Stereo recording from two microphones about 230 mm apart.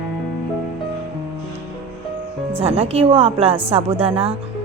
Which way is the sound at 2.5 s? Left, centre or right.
Right.